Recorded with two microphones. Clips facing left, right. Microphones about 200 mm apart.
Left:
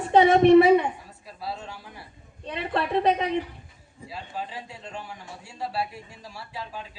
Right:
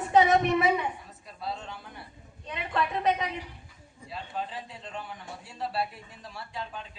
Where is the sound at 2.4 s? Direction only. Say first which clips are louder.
Left 3 dB; 30° left (ahead or behind).